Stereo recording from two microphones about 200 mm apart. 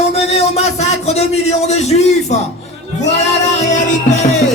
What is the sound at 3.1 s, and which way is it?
Music, 35° left (ahead or behind).